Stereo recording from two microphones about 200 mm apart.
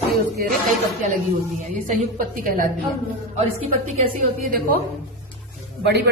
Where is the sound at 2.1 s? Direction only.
40° right (ahead or behind).